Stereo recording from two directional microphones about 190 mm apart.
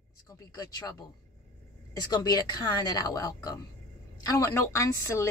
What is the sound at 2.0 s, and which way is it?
A woman's voice, 20° left (ahead or behind).